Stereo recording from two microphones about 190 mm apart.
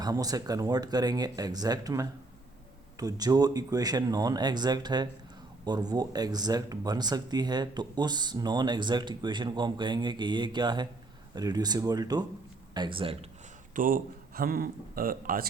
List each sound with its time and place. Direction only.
0.0 s speech: 20° right (ahead or behind)
13.7 s speech: 45° right (ahead or behind)